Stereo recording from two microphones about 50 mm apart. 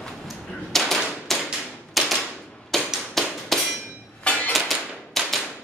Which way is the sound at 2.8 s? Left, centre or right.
Centre.